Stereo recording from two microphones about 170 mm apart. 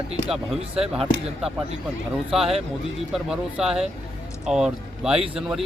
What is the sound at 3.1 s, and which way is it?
Speech, 5° right (ahead or behind).